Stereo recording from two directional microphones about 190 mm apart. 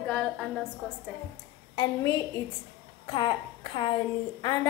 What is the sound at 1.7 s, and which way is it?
Speech, 20° left (ahead or behind).